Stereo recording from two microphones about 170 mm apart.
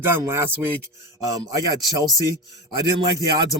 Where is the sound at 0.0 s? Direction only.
15° right (ahead or behind).